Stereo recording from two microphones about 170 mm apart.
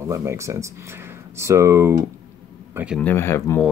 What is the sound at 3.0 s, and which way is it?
Speech, 10° left (ahead or behind).